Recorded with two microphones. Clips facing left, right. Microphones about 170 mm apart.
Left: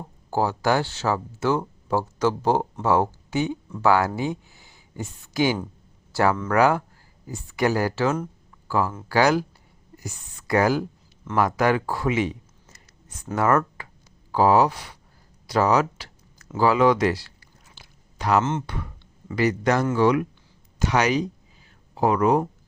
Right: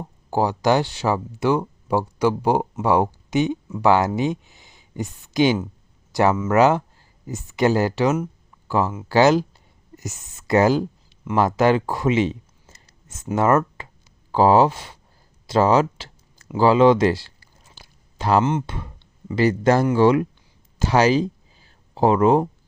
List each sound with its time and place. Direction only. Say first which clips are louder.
0.3 s speech: right 3 dB; 20° right (ahead or behind)
15.4 s a sound: right 3 dB; 25° right (ahead or behind)
16.6 s speech: right 4 dB; 25° right (ahead or behind)
17.7 s chewing: right 2 dB; 30° right (ahead or behind)
18.6 s speech: even; 25° right (ahead or behind)